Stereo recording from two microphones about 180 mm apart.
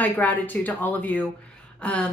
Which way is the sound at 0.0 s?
10° left (ahead or behind).